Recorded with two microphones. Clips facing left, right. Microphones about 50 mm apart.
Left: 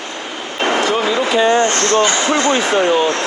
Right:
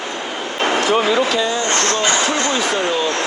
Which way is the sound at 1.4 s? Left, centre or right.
Left.